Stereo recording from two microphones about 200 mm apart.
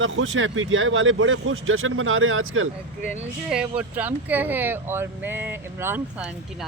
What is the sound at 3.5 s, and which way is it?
Speech, 5° right (ahead or behind).